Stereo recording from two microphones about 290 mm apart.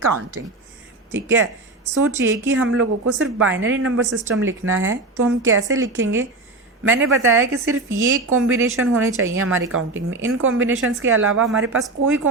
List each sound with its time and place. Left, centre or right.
0.4 s a woman's voice: right